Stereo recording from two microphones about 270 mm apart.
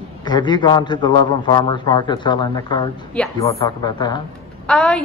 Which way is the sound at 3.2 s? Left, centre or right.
Centre.